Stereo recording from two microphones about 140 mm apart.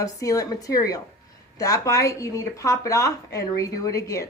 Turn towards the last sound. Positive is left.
turn(degrees=25)  # may be behind; listen again after turning